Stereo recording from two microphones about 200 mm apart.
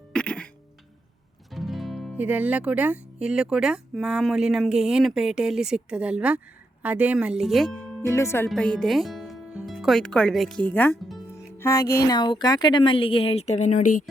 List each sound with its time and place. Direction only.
0.1 s music: 5° left (ahead or behind)
1.5 s speech: centre (ahead or behind)
8.0 s speech: 15° left (ahead or behind); by 14.0 s 40° left (ahead or behind)